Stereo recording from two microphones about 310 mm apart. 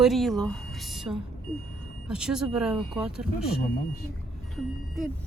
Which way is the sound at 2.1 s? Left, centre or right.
Centre.